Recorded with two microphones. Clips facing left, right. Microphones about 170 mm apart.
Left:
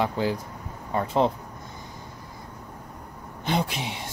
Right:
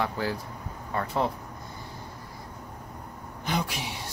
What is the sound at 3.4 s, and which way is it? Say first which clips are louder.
Speech: left 4 dB; 25° left (ahead or behind).